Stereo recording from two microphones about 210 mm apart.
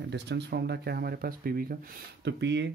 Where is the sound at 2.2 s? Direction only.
55° right (ahead or behind).